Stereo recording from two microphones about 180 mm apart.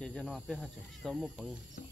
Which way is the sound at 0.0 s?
5° left (ahead or behind).